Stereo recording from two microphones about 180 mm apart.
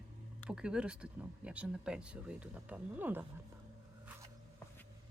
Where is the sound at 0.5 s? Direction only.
5° right (ahead or behind).